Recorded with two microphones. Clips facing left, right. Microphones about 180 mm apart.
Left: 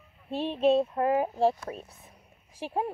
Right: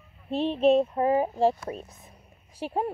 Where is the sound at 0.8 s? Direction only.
5° right (ahead or behind).